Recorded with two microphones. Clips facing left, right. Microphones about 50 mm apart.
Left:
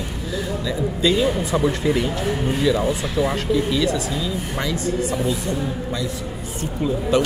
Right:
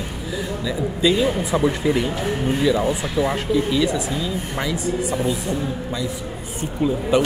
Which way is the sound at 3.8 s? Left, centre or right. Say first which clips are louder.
Even; centre.